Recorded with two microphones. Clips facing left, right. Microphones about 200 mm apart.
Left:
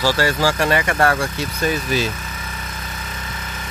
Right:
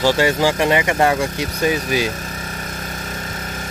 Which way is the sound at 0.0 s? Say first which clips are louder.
Right 3 dB; 20° right (ahead or behind).